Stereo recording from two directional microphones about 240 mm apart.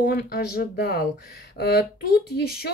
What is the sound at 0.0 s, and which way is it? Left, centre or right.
Speech, left.